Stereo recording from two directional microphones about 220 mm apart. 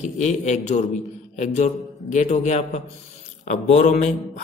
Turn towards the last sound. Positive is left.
turn(degrees=35)  # may be behind; listen again after turning